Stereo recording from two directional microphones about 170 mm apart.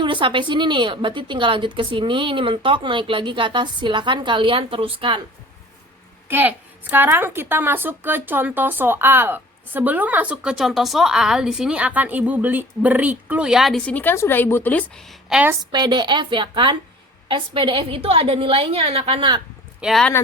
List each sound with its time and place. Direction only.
0.0 s a woman's voice: 30° right (ahead or behind)
6.2 s speech: 10° right (ahead or behind)
15.7 s a woman's voice: 25° right (ahead or behind)
19.8 s speech: centre (ahead or behind)